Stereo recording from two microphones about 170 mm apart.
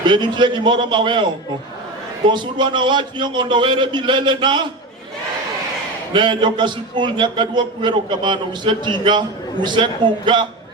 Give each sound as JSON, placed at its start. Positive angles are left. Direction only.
{"t": 0.1, "sound": "a man's voice", "side_deg": -25}
{"t": 2.3, "sound": "a man's voice", "side_deg": -25}
{"t": 6.1, "sound": "a man's voice", "side_deg": -30}